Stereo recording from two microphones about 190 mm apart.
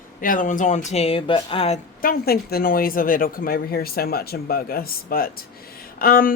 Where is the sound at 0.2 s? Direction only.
45° left (ahead or behind).